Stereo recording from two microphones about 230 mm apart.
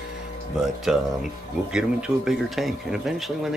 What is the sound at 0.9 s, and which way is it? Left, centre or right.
Speech, centre.